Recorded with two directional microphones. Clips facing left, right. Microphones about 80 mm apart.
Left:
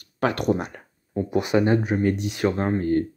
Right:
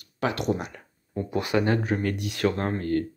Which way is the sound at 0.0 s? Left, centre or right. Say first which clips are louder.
Left 4 dB; left.